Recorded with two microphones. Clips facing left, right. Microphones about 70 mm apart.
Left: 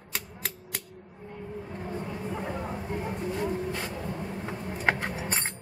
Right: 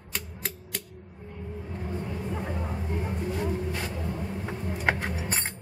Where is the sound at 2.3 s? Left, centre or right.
Centre.